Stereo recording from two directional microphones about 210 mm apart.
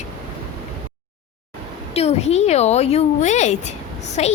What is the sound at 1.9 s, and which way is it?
Speech, 30° left (ahead or behind).